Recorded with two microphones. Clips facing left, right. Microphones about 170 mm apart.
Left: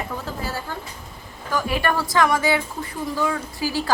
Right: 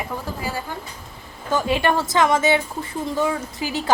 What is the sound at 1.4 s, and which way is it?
A woman's voice, 25° right (ahead or behind).